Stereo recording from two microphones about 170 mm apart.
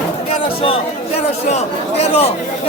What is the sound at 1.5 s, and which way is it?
Speech, 40° left (ahead or behind).